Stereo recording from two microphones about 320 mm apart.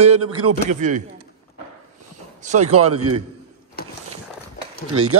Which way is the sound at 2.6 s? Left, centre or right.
Right.